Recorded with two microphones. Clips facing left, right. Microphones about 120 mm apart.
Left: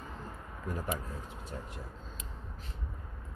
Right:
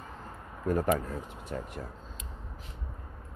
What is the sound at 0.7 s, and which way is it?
Speech, 65° right (ahead or behind).